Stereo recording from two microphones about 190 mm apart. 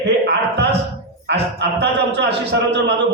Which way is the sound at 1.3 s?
60° right (ahead or behind).